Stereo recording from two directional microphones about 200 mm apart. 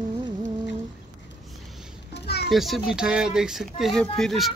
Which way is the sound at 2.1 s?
55° left (ahead or behind).